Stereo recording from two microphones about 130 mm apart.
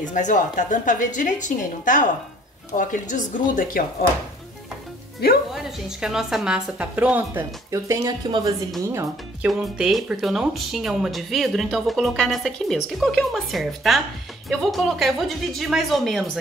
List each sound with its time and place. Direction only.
0.0 s a woman's voice: 75° left (ahead or behind); by 3.8 s 90° left
5.5 s a woman's voice: 5° right (ahead or behind); by 8.5 s 30° right (ahead or behind)
8.8 s speech: 20° right (ahead or behind)
9.5 s speech: centre (ahead or behind)